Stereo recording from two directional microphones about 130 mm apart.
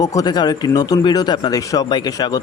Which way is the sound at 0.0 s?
30° left (ahead or behind).